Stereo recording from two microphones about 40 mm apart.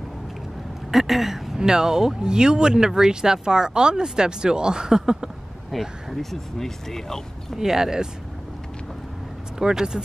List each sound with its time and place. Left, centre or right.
0.9 s speech: centre
5.7 s speech: centre
6.6 s speech: centre
7.5 s speech: centre
9.6 s speech: centre